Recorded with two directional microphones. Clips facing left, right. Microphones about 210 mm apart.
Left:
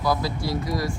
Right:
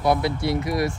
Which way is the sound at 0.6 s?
25° right (ahead or behind).